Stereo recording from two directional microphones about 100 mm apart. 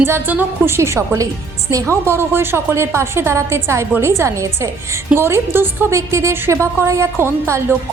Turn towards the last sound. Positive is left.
turn(degrees=-30)  # may be behind; listen again after turning